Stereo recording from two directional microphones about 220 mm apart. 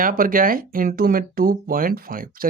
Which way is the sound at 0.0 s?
40° right (ahead or behind).